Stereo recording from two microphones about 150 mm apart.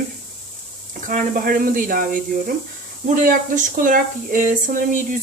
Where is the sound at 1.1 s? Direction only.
60° right (ahead or behind).